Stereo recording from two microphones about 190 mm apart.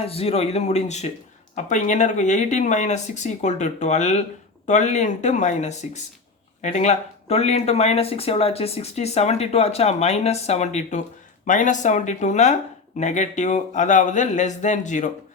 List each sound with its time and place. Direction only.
0.0 s speech: 30° left (ahead or behind)